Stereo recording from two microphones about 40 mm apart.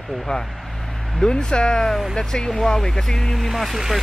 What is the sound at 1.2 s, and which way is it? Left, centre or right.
Speech, left.